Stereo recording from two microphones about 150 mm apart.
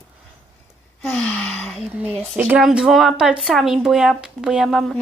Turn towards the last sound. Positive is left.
turn(degrees=0)  # may be behind; listen again after turning